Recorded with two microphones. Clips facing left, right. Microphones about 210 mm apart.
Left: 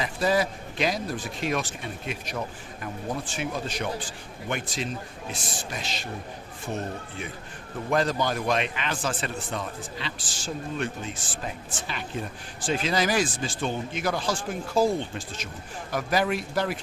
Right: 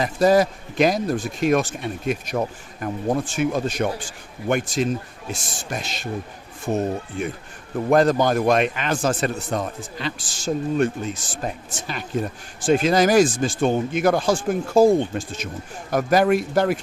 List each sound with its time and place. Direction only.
0.0 s a man's voice: 45° right (ahead or behind)
7.9 s a man's voice: 50° right (ahead or behind)